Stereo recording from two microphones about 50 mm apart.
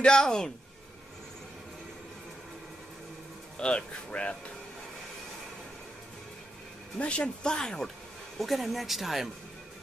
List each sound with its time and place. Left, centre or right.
0.0 s speech: centre
3.5 s speech: left
7.0 s speech: left
8.4 s speech: centre